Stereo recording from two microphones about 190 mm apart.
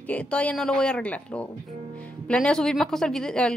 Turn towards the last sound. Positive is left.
turn(degrees=5)  # may be behind; listen again after turning